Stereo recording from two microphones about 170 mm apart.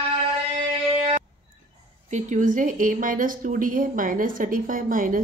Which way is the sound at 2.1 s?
45° right (ahead or behind).